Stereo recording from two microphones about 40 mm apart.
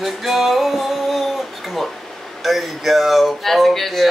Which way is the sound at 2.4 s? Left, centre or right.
Centre.